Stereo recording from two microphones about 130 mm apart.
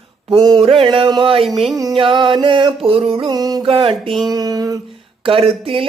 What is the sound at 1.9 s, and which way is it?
Music, 40° right (ahead or behind).